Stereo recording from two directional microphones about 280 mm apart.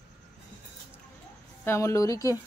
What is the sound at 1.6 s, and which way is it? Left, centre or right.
Speech, centre.